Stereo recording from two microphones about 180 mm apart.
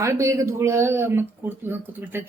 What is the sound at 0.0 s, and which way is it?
Speech, 15° right (ahead or behind).